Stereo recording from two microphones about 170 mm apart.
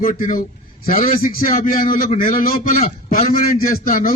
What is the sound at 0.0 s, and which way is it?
A man's voice, 55° left (ahead or behind).